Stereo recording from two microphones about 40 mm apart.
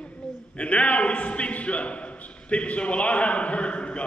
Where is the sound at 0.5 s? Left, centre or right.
Left.